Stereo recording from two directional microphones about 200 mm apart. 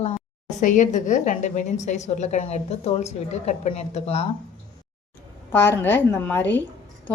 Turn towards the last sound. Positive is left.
turn(degrees=10)  # may be behind; listen again after turning